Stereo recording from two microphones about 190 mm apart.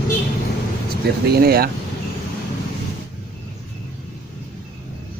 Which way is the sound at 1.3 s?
55° right (ahead or behind).